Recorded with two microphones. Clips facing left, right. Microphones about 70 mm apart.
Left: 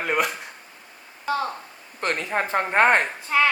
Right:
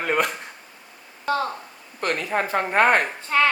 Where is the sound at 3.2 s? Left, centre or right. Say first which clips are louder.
Right 1 dB; centre.